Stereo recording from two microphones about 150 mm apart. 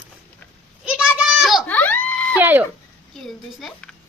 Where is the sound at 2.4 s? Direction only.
15° right (ahead or behind).